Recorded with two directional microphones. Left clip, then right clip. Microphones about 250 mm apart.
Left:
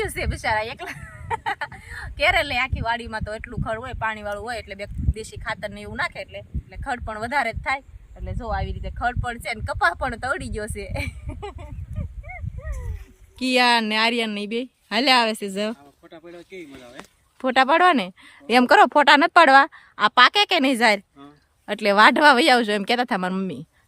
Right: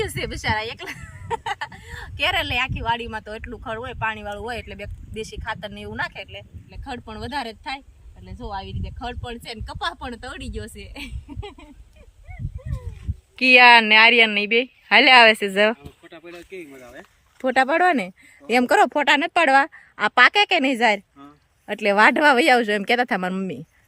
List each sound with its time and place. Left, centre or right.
0.0 s speech: centre
13.3 s speech: centre